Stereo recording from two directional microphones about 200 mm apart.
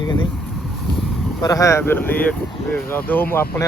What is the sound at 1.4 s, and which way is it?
Speech, 15° left (ahead or behind).